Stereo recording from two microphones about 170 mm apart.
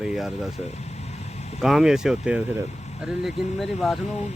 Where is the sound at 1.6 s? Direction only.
5° right (ahead or behind).